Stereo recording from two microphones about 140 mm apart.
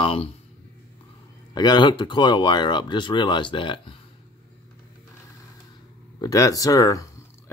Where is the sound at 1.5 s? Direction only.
30° left (ahead or behind).